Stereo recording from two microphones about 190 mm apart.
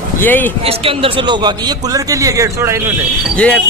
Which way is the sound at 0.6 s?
30° right (ahead or behind).